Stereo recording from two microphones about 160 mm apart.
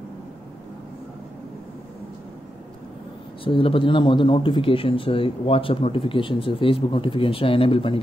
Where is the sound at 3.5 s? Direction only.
35° left (ahead or behind).